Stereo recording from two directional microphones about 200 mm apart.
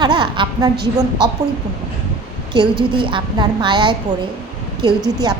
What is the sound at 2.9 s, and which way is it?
A woman's voice, 25° right (ahead or behind).